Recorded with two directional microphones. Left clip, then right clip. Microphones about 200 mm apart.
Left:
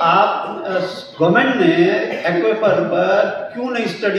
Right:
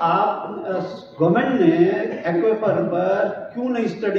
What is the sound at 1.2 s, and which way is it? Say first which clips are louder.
Speech: left 3 dB; 55° left (ahead or behind).